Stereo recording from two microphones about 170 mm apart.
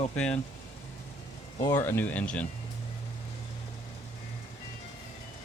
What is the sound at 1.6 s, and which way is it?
Speech, 15° left (ahead or behind).